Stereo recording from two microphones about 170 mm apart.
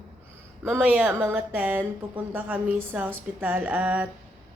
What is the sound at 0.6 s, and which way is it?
Speech, 15° right (ahead or behind).